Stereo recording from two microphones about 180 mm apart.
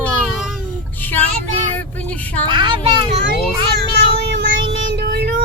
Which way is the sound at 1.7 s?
10° left (ahead or behind).